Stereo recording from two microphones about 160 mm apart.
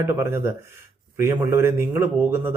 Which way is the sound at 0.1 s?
15° right (ahead or behind).